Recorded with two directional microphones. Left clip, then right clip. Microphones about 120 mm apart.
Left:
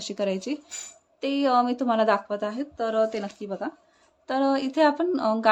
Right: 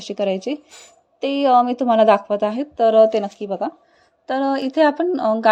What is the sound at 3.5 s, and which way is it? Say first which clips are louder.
A woman's voice: right 8 dB; 30° right (ahead or behind).